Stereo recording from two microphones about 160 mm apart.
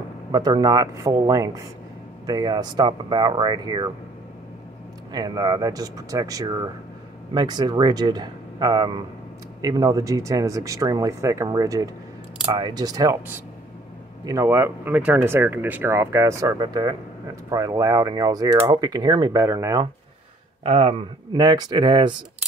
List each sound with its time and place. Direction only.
0.3 s speech: 25° right (ahead or behind)
5.1 s speech: 25° right (ahead or behind)
14.2 s speech: 20° right (ahead or behind)
20.6 s speech: 40° right (ahead or behind)
21.3 s speech: 25° right (ahead or behind)